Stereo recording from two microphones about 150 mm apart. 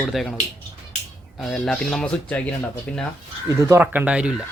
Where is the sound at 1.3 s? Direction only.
Centre (ahead or behind).